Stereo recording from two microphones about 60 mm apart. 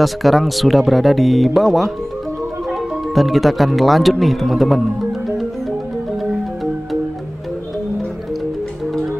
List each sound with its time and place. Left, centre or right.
0.0 s speech: centre